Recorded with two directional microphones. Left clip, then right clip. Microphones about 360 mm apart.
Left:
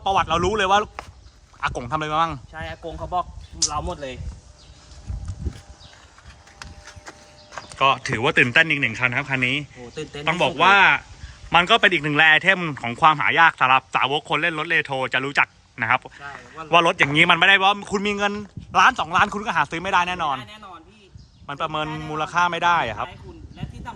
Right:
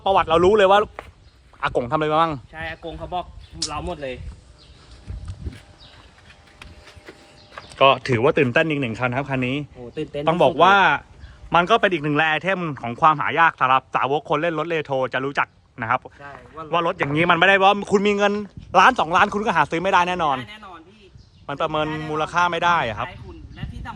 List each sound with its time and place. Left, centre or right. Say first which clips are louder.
0.0 s a man's voice: right 4 dB; centre
7.8 s a man's voice: right 3 dB; centre
9.9 s speech: right 5 dB; right
10.2 s a man's voice: right 2 dB; centre